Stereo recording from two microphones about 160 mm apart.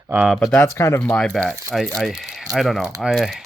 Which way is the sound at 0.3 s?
10° left (ahead or behind).